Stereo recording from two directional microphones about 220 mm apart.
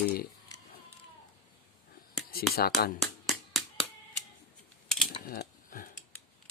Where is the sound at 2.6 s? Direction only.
45° left (ahead or behind).